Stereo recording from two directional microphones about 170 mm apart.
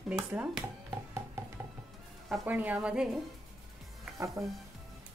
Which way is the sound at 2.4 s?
10° right (ahead or behind).